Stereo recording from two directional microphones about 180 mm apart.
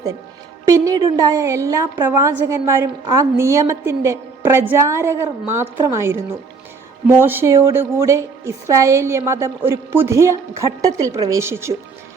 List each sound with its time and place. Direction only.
0.7 s a woman's voice: 20° right (ahead or behind)
7.2 s a woman's voice: 10° right (ahead or behind)